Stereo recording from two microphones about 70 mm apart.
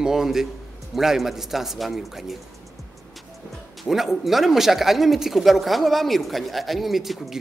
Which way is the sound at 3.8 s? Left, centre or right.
Centre.